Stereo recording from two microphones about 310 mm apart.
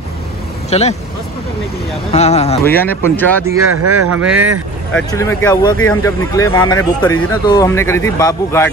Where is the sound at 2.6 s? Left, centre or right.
Centre.